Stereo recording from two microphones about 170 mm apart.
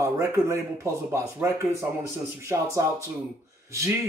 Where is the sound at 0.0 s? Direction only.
15° right (ahead or behind).